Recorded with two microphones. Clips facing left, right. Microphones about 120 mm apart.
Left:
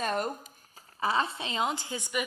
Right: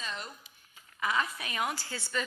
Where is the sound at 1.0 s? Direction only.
30° left (ahead or behind).